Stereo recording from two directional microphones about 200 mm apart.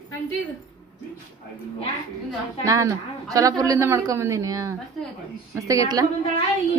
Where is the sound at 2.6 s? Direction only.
15° right (ahead or behind).